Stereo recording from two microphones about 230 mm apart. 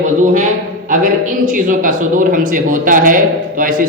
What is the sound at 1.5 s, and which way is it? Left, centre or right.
A man's voice, right.